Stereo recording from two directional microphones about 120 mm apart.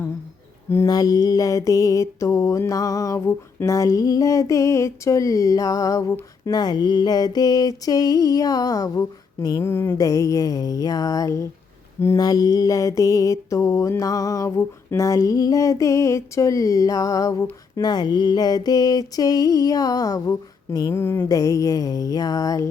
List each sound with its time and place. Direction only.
0.7 s mantra: 30° left (ahead or behind)
9.6 s mantra: 20° left (ahead or behind)